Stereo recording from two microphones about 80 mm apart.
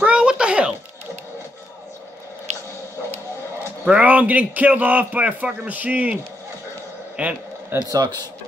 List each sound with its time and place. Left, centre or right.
0.0 s a sound: centre
3.8 s a man's voice: centre
7.2 s speech: centre
7.9 s speech: right